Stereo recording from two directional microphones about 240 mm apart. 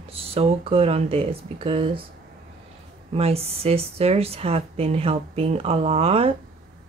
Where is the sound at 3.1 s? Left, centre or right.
Right.